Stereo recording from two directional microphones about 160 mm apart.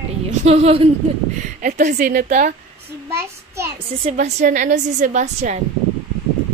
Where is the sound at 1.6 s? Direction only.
55° right (ahead or behind).